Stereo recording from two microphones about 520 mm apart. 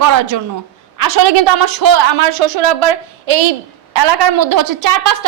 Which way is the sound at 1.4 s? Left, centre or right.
Right.